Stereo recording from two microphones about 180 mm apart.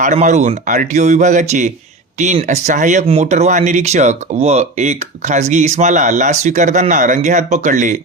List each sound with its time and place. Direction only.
0.0 s speech: 40° right (ahead or behind)